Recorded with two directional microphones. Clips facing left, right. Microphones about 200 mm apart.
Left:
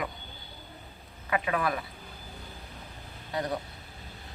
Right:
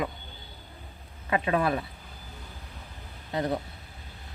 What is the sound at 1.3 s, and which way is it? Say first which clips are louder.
Speech: right 3 dB; 25° right (ahead or behind).